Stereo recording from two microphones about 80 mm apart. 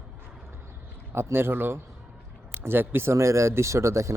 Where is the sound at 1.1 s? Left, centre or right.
Right.